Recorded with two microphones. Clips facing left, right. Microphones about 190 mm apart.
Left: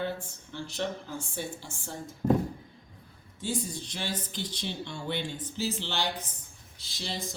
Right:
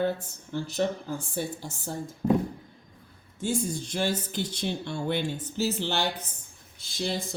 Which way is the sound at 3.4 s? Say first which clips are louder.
Right 5 dB; 50° right (ahead or behind).